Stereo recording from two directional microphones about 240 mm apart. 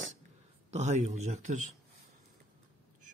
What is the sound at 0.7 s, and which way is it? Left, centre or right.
Speech, right.